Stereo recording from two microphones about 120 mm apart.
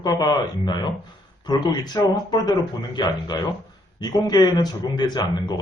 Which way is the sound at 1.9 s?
35° left (ahead or behind).